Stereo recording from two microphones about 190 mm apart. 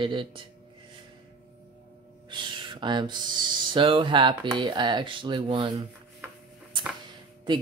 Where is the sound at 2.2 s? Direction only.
25° right (ahead or behind).